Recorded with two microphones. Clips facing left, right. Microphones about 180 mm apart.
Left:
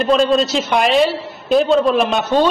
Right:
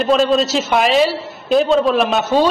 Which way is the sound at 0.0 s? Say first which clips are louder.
Even; centre (ahead or behind).